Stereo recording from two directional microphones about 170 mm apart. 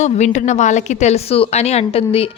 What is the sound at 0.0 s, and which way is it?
A woman's voice, 45° left (ahead or behind).